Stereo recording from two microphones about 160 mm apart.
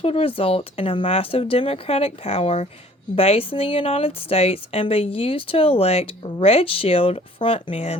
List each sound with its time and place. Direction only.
0.0 s speech: 35° left (ahead or behind)